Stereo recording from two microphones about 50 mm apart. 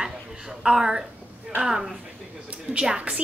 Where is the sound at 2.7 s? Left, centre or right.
Right.